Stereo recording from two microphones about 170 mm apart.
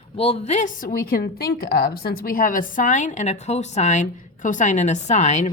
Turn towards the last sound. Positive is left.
turn(degrees=40)  # may be behind; listen again after turning